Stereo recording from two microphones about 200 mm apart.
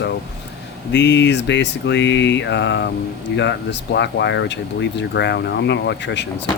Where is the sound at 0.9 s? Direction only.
60° left (ahead or behind).